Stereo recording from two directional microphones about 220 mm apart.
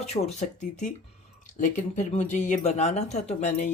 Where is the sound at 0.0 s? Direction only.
30° left (ahead or behind).